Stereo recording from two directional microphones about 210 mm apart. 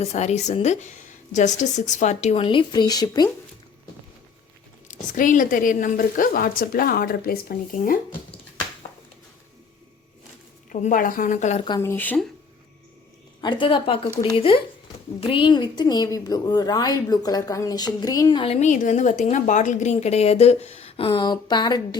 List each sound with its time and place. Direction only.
0.0 s a woman's voice: 30° left (ahead or behind)
4.9 s a woman's voice: 40° left (ahead or behind)
10.7 s a woman's voice: 40° left (ahead or behind)
11.6 s speech: 15° left (ahead or behind)
13.4 s a woman's voice: 20° left (ahead or behind)